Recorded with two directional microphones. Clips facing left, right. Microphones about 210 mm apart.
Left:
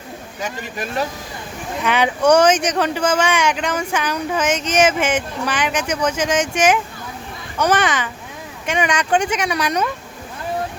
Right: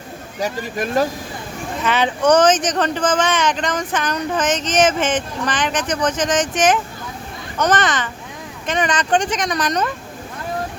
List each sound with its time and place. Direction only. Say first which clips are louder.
0.3 s speech: right 5 dB; 40° right (ahead or behind)
1.8 s speech: left 1 dB; 10° left (ahead or behind)